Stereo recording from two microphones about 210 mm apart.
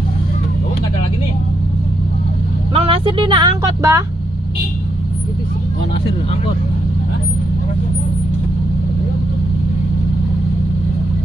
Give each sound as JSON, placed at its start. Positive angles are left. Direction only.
{"t": 2.7, "sound": "vehicle", "side_deg": -25}
{"t": 3.2, "sound": "speech", "side_deg": -20}